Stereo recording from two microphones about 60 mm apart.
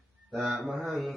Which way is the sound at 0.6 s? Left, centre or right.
Centre.